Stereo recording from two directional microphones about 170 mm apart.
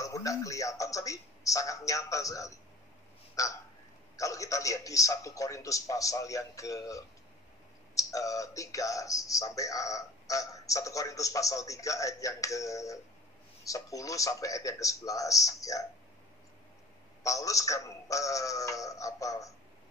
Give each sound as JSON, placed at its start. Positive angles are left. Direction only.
{"t": 0.0, "sound": "speech", "side_deg": 20}
{"t": 17.2, "sound": "speech", "side_deg": 20}